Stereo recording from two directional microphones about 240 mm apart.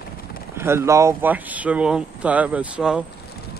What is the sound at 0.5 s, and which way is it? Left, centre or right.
Speech, centre.